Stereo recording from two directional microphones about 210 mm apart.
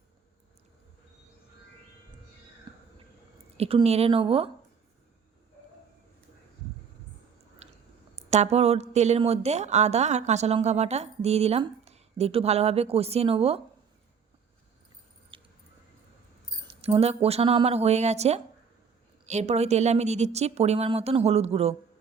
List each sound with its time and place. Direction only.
3.6 s speech: 30° right (ahead or behind)
7.6 s chewing: 30° right (ahead or behind)
8.1 s speech: 30° right (ahead or behind)
15.3 s mouse: 25° right (ahead or behind)
16.6 s speech: 30° right (ahead or behind)